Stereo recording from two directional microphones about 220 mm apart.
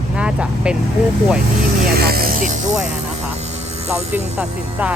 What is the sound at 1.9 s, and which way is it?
Music, 45° right (ahead or behind).